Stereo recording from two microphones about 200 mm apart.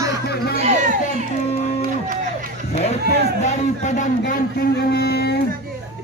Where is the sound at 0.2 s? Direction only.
50° left (ahead or behind).